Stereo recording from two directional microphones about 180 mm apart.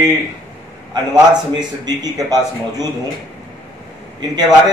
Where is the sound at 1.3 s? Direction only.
25° right (ahead or behind).